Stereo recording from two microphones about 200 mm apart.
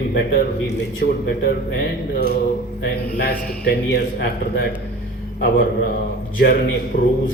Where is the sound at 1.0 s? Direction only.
50° left (ahead or behind).